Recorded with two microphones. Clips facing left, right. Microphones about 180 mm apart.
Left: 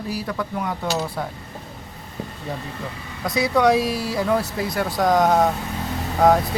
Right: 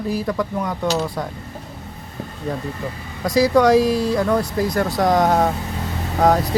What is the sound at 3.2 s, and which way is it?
Speech, centre (ahead or behind).